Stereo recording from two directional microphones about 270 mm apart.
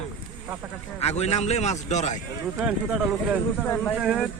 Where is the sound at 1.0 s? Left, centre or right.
Left.